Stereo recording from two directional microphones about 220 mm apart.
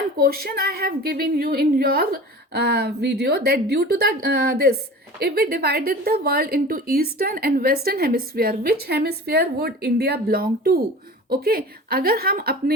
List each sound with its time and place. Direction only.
0.2 s a woman's voice: 45° right (ahead or behind)